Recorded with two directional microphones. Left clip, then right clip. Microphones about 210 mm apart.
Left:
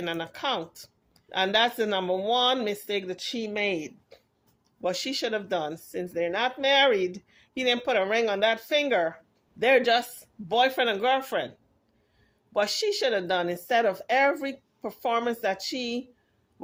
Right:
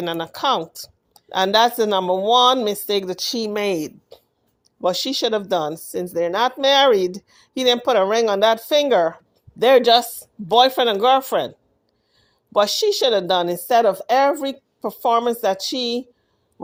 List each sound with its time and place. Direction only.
0.0 s speech: 40° right (ahead or behind)
12.5 s speech: 35° right (ahead or behind)